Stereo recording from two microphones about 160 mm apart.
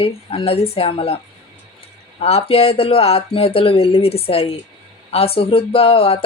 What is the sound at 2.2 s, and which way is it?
Speech, 40° left (ahead or behind).